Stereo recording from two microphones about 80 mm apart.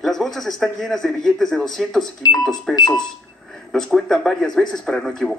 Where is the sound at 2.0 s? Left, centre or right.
Left.